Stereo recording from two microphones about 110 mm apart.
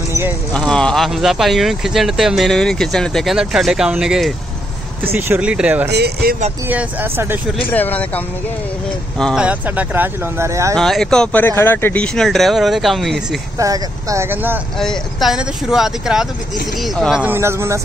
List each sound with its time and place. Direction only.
0.5 s speech: 5° left (ahead or behind)
5.0 s speech: 20° right (ahead or behind)
7.7 s speech: 15° left (ahead or behind)
9.3 s speech: 10° right (ahead or behind); by 10.8 s 30° right (ahead or behind)
10.8 s speech: 5° left (ahead or behind)
11.3 s speech: 20° left (ahead or behind); by 13.4 s centre (ahead or behind)
13.6 s speech: 30° right (ahead or behind)
14.8 s speech: centre (ahead or behind)
17.2 s speech: 20° right (ahead or behind)